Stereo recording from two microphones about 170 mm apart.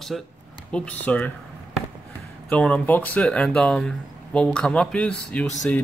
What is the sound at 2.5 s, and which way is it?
Speech, 5° left (ahead or behind).